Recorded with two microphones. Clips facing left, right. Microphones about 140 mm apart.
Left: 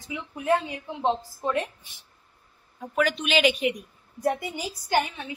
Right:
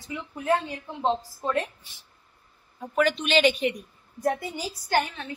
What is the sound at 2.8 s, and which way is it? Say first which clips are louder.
A woman's voice: right 1 dB; centre (ahead or behind).